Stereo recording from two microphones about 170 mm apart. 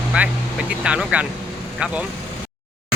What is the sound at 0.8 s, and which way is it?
Speech, 5° right (ahead or behind).